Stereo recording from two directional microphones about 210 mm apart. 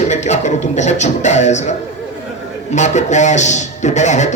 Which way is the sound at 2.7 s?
35° left (ahead or behind).